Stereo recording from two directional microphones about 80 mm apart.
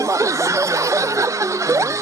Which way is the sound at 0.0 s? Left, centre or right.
Right.